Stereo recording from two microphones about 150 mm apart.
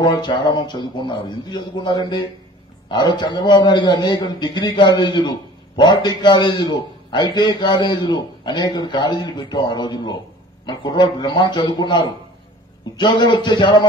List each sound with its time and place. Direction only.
0.0 s a man's voice: 30° left (ahead or behind)